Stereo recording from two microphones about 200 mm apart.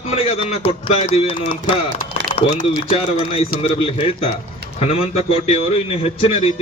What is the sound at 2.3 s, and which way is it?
A man's voice, 35° left (ahead or behind).